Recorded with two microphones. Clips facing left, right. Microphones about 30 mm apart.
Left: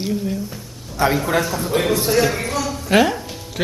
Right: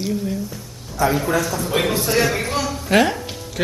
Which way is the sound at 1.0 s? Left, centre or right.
Left.